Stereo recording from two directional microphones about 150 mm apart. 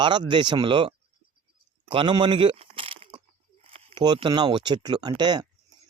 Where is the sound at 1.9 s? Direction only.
30° right (ahead or behind).